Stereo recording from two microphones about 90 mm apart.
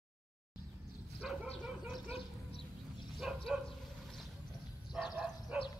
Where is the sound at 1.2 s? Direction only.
10° right (ahead or behind).